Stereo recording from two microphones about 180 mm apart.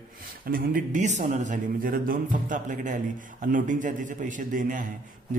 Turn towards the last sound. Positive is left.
turn(degrees=-45)  # may be behind; listen again after turning